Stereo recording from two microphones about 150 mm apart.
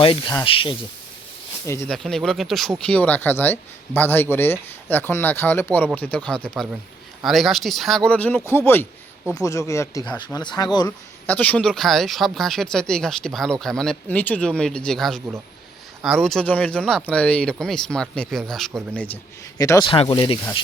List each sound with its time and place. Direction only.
0.0 s speech: 35° left (ahead or behind)
1.9 s speech: centre (ahead or behind); by 10.9 s 25° left (ahead or behind)
11.3 s speech: 10° left (ahead or behind)
19.5 s speech: 25° left (ahead or behind)
19.9 s speech: 35° left (ahead or behind)